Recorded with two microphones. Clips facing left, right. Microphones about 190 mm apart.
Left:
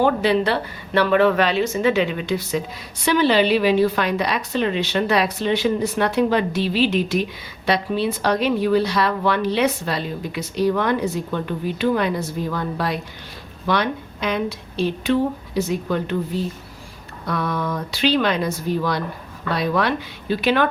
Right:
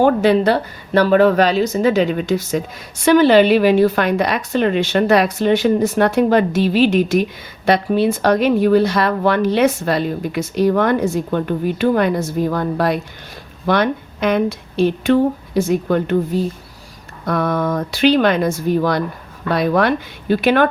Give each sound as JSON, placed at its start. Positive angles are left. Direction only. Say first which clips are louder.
{"t": 0.0, "sound": "a woman's voice", "louder": "right 5 dB", "side_deg": -45}